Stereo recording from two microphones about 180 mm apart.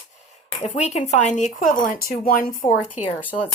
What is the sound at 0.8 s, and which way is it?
Speech, 40° left (ahead or behind).